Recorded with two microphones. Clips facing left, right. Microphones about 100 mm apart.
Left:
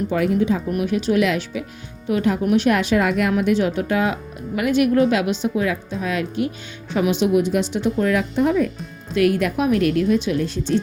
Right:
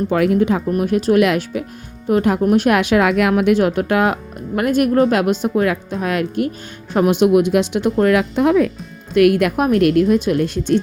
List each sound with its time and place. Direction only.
0.1 s speech: 65° right (ahead or behind)
0.7 s speech: 45° right (ahead or behind)
2.7 s speech: 65° right (ahead or behind); by 7.3 s 50° right (ahead or behind)
7.3 s speech: 70° right (ahead or behind)
9.1 s speech: 60° right (ahead or behind)